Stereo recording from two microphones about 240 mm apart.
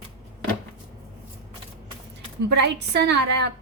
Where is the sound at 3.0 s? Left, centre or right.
Right.